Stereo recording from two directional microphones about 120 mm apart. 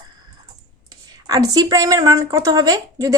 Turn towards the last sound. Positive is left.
turn(degrees=-30)  # may be behind; listen again after turning